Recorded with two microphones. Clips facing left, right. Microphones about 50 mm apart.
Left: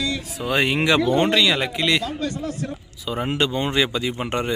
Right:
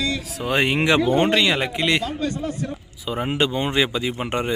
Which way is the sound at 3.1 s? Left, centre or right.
Centre.